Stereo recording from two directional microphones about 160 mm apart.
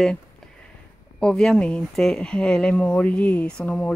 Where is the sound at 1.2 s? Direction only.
5° left (ahead or behind).